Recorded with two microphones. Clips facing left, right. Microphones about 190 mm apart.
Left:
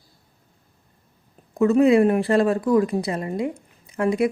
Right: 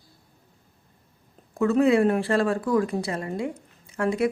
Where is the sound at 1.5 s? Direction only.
20° left (ahead or behind).